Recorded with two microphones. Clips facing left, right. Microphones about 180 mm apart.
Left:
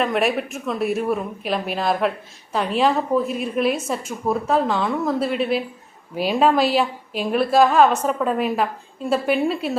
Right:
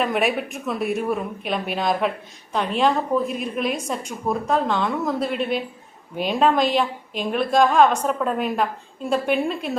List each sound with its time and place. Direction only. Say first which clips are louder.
0.0 s speech: left 1 dB; centre (ahead or behind)